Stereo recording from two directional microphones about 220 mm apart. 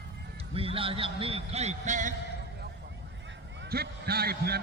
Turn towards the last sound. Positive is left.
turn(degrees=-45)  # may be behind; listen again after turning